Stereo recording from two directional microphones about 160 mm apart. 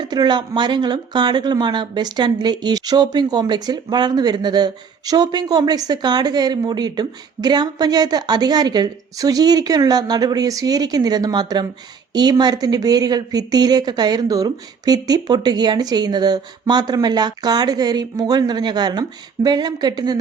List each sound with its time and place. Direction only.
0.0 s speech: 25° right (ahead or behind)